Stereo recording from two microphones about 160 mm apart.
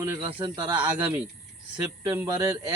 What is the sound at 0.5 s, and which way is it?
Speech, 10° right (ahead or behind).